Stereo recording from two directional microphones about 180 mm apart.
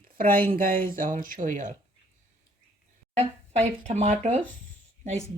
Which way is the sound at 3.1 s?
35° right (ahead or behind).